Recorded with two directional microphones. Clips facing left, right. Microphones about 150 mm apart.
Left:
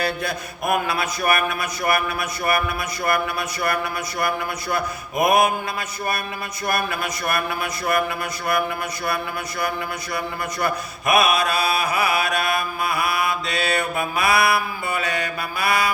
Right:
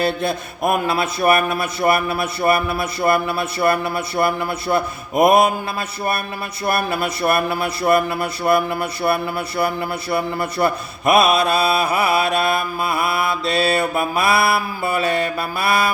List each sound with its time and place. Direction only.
0.0 s mantra: 25° right (ahead or behind)
6.7 s mantra: 30° right (ahead or behind)